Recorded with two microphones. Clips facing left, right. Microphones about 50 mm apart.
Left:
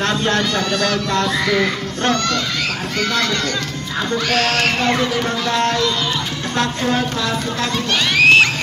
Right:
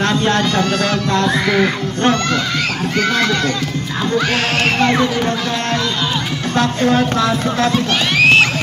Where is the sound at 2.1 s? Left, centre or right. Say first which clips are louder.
Right 2 dB; centre.